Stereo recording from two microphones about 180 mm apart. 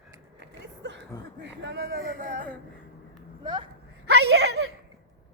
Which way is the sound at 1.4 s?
75° right (ahead or behind).